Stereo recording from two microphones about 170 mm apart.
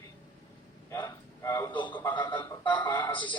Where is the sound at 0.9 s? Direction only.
15° left (ahead or behind).